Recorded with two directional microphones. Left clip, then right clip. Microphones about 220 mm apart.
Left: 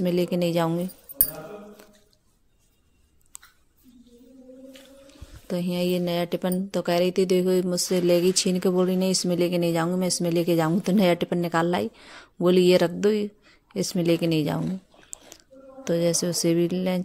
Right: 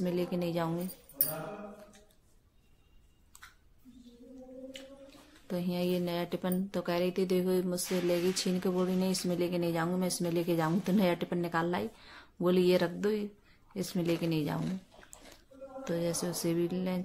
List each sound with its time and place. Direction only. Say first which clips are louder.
0.0 s speech: left 9 dB; 40° left (ahead or behind)
5.5 s speech: left 7 dB; 35° left (ahead or behind)
15.8 s speech: left 10 dB; 35° left (ahead or behind)